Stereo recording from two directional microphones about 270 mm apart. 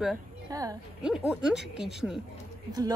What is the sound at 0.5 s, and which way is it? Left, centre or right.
Speech, centre.